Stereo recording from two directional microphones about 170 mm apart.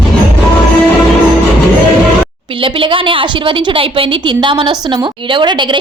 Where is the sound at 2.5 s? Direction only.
30° right (ahead or behind).